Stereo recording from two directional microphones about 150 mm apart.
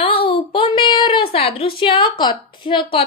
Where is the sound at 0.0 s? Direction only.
40° left (ahead or behind).